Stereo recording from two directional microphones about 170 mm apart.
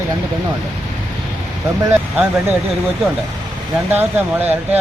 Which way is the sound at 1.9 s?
10° right (ahead or behind).